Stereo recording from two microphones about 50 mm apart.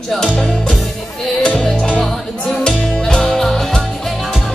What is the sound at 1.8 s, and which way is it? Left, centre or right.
Music, centre.